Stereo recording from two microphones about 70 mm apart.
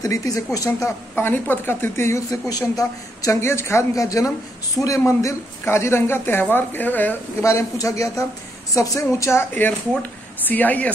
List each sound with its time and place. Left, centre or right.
0.0 s speech: left
1.1 s speech: left
2.3 s speech: left
3.9 s speech: left
7.4 s speech: left
9.3 s speech: left
10.4 s speech: left